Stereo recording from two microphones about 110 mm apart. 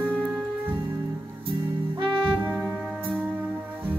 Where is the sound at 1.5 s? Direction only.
50° right (ahead or behind).